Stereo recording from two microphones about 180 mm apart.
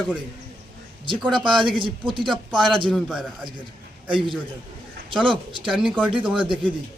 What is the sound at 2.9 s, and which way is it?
Speech, centre (ahead or behind).